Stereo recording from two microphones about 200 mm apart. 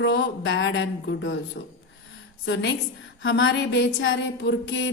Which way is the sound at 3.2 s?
65° left (ahead or behind).